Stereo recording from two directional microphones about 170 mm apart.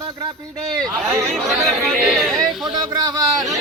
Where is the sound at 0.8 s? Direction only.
Centre (ahead or behind).